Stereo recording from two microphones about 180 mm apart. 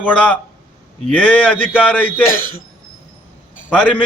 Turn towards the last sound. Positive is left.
turn(degrees=10)  # may be behind; listen again after turning